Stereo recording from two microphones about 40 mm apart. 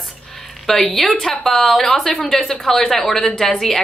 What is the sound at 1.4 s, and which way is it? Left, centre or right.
A woman's voice, centre.